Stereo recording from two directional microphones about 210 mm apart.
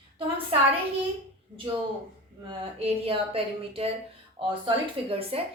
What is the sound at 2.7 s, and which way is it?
A woman's voice, 25° right (ahead or behind).